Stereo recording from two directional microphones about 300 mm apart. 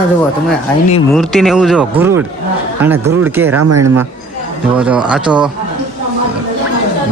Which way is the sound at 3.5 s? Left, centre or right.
Right.